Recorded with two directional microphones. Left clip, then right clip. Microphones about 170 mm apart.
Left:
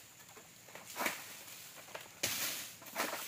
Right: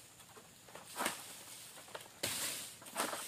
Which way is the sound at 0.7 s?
Centre (ahead or behind).